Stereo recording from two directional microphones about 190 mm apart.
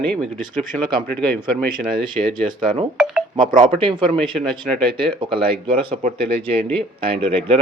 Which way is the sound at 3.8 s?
25° right (ahead or behind).